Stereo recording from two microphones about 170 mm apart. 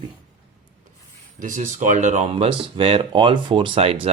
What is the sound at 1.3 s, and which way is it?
Speech, 50° right (ahead or behind).